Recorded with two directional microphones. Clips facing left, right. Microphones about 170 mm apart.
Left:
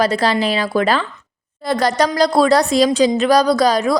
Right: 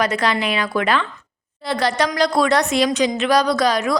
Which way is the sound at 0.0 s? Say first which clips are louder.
Left 4 dB; 30° left (ahead or behind).